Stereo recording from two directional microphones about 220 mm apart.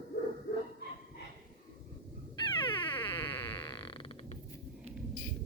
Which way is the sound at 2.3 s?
20° left (ahead or behind).